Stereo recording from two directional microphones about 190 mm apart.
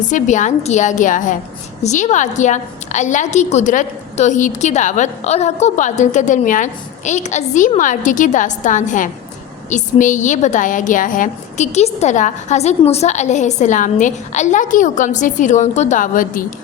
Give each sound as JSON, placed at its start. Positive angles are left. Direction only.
{"t": 0.0, "sound": "a woman's voice", "side_deg": 40}